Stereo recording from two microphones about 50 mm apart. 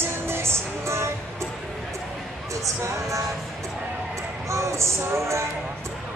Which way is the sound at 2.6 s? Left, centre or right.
Right.